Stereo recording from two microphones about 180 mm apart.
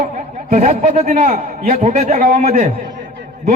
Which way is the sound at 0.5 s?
40° right (ahead or behind).